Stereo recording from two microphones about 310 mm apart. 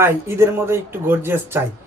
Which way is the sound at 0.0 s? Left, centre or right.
Centre.